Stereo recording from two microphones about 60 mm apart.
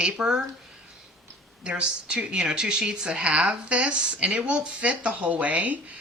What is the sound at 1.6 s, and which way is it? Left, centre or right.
A woman's voice, centre.